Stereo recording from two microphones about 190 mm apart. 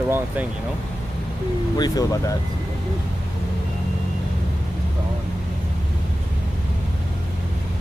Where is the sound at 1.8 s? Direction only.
20° left (ahead or behind).